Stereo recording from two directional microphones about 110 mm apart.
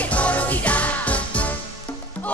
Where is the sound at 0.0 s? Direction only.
10° left (ahead or behind).